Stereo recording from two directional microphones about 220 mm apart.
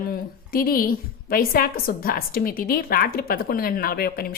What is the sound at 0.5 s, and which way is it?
A woman's voice, 40° left (ahead or behind).